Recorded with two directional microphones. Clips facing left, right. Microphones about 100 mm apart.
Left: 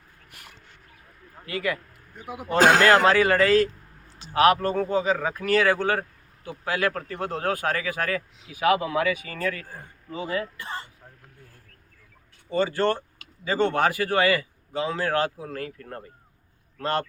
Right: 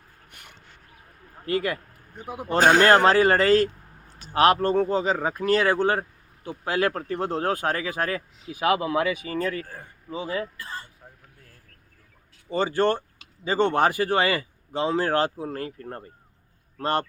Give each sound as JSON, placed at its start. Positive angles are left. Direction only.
{"t": 0.3, "sound": "a sound", "side_deg": 0}
{"t": 1.5, "sound": "a man's voice", "side_deg": -35}
{"t": 2.6, "sound": "speech", "side_deg": 90}
{"t": 3.0, "sound": "a man's voice", "side_deg": -35}
{"t": 10.6, "sound": "speech", "side_deg": 25}
{"t": 12.5, "sound": "a man's voice", "side_deg": -25}